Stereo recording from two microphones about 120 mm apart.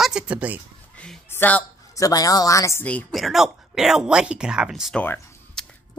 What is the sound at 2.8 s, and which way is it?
Speech, 15° left (ahead or behind).